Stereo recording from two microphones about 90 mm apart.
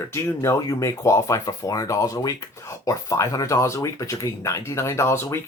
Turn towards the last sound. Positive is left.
turn(degrees=30)  # may be behind; listen again after turning